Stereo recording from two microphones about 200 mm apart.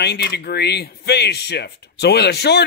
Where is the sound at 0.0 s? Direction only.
55° left (ahead or behind).